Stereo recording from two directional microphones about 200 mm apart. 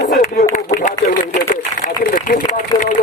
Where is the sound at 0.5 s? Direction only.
40° left (ahead or behind).